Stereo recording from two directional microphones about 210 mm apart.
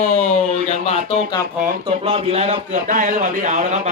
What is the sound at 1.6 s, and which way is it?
Speech, 30° right (ahead or behind).